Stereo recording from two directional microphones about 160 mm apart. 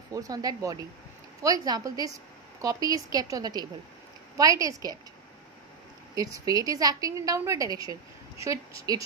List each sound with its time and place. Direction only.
0.1 s a woman's voice: 25° right (ahead or behind)
6.1 s a woman's voice: 25° right (ahead or behind)